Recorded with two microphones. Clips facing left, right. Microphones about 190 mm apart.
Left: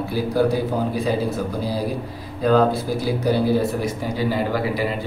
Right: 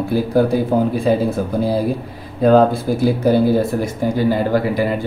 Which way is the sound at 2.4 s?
55° right (ahead or behind).